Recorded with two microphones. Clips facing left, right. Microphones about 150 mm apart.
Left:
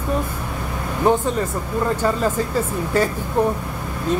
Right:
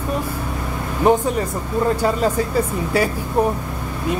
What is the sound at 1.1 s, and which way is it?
Speech, 15° right (ahead or behind).